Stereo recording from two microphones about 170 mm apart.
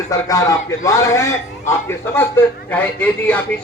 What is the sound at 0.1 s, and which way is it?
A man's voice, 20° left (ahead or behind).